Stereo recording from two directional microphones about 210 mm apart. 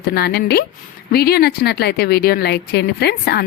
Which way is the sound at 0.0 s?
50° left (ahead or behind).